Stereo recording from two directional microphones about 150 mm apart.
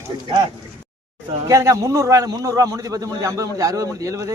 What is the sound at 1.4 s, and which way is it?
A man's voice, 20° right (ahead or behind).